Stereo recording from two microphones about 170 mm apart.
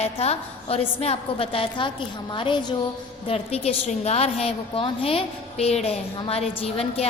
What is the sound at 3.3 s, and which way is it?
A woman's voice, 35° left (ahead or behind).